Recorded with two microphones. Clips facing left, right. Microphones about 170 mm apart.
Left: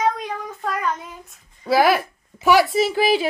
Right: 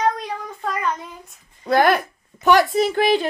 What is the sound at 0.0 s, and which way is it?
Child singing, 5° left (ahead or behind).